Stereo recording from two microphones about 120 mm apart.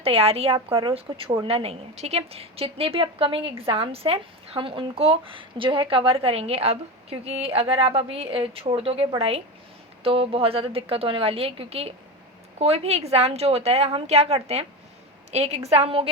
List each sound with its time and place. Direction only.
0.0 s a woman's voice: 55° right (ahead or behind)
1.5 s a woman's voice: 55° right (ahead or behind)